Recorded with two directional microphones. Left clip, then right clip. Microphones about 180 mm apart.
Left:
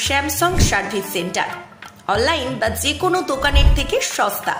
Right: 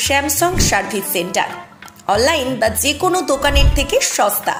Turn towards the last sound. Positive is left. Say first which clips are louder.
# right 3 dB
turn(degrees=-10)  # may be behind; listen again after turning